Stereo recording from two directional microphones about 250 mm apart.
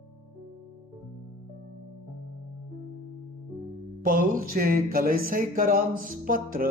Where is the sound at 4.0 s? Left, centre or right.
Right.